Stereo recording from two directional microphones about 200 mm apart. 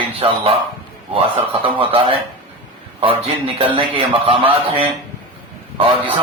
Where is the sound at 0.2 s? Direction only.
25° right (ahead or behind).